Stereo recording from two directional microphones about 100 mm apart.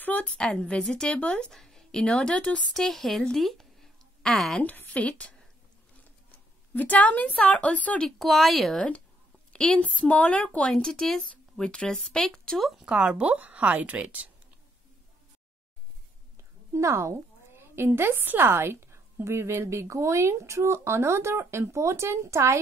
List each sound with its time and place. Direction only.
0.0 s speech: 15° left (ahead or behind)
4.6 s a woman's voice: 15° left (ahead or behind)
6.7 s a woman's voice: 15° left (ahead or behind)
8.2 s a woman's voice: centre (ahead or behind)
12.8 s speech: 10° right (ahead or behind)
16.7 s a woman's voice: 30° right (ahead or behind)